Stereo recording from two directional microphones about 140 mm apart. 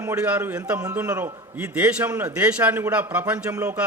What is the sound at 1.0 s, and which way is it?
Speech, 25° right (ahead or behind).